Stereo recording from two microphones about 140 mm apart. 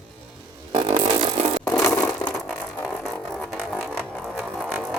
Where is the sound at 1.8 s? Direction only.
5° left (ahead or behind).